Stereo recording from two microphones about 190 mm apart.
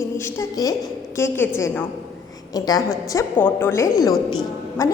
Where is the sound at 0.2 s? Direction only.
15° left (ahead or behind).